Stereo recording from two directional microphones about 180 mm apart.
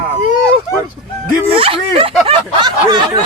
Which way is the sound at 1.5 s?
30° right (ahead or behind).